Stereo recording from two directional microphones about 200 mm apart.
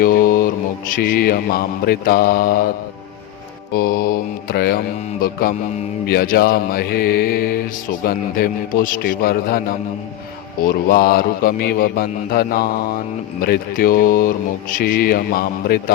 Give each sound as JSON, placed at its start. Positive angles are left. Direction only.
{"t": 0.0, "sound": "mantra", "side_deg": 45}
{"t": 3.8, "sound": "mantra", "side_deg": 50}
{"t": 10.8, "sound": "mantra", "side_deg": 50}